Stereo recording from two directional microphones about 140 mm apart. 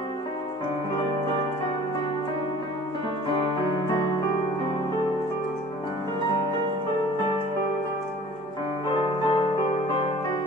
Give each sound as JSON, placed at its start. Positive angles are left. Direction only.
{"t": 8.9, "sound": "music", "side_deg": 35}